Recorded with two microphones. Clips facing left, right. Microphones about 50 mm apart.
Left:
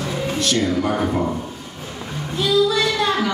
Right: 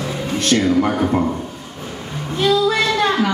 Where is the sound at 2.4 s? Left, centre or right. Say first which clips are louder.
Right 2 dB; right.